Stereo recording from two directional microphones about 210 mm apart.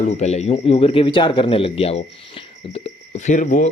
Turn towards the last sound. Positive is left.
turn(degrees=35)  # may be behind; listen again after turning